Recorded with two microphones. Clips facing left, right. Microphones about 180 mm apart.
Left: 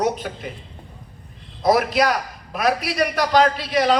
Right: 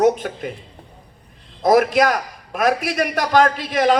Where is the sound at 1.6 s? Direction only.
50° right (ahead or behind).